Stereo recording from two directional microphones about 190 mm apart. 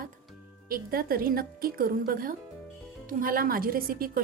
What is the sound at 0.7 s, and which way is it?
A woman's voice, 50° right (ahead or behind).